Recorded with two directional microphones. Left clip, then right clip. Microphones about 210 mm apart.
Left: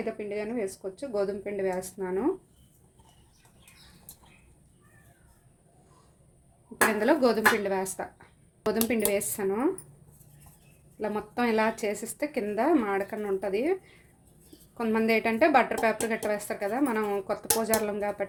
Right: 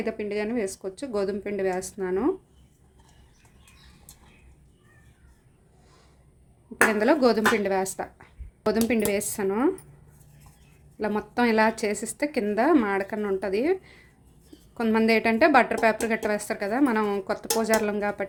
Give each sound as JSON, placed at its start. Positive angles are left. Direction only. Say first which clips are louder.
{"t": 0.0, "sound": "speech", "louder": "right 4 dB", "side_deg": -20}
{"t": 7.0, "sound": "a woman's voice", "louder": "even", "side_deg": -15}
{"t": 11.0, "sound": "a woman's voice", "louder": "right 4 dB", "side_deg": -15}
{"t": 14.8, "sound": "a woman's voice", "louder": "right 3 dB", "side_deg": -15}